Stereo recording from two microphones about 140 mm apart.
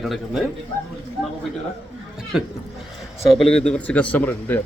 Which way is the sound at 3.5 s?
5° left (ahead or behind).